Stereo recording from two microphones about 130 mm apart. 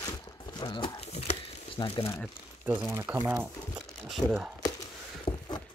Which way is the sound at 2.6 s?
15° right (ahead or behind).